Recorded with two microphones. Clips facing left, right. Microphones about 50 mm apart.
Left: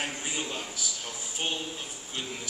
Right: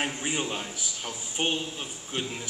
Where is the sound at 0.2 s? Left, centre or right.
Right.